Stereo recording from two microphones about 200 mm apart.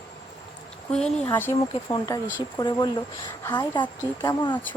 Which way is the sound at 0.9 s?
5° left (ahead or behind).